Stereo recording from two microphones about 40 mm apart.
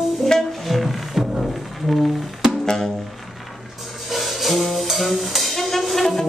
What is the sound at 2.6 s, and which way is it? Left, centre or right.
Music, centre.